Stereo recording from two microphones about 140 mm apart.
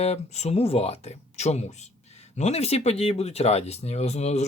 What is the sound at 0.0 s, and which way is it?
Speech, 50° left (ahead or behind).